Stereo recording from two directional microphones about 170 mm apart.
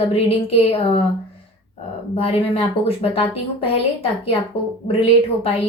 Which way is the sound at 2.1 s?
35° left (ahead or behind).